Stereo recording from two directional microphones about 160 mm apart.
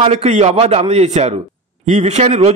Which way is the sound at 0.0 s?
45° right (ahead or behind).